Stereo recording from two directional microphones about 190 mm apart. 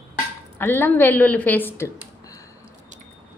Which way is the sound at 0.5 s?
10° left (ahead or behind).